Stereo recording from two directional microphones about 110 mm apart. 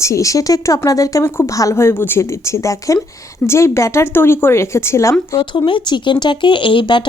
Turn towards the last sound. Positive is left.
turn(degrees=45)  # may be behind; listen again after turning